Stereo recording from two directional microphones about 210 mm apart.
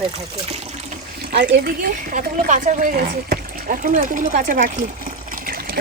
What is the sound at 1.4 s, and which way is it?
A woman's voice, 45° right (ahead or behind).